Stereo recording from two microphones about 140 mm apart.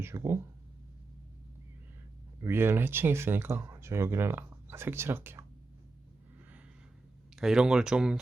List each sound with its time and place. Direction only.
0.0 s speech: 20° right (ahead or behind)
2.4 s speech: 15° right (ahead or behind)
7.3 s speech: 5° right (ahead or behind)